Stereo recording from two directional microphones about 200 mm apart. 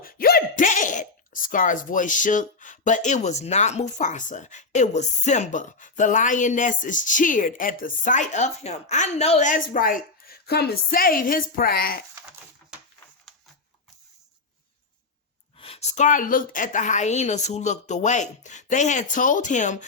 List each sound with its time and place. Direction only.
0.0 s speech: 45° left (ahead or behind)
15.5 s speech: 30° left (ahead or behind)